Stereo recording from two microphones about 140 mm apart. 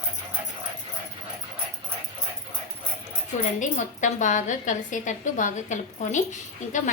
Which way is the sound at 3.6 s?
65° left (ahead or behind).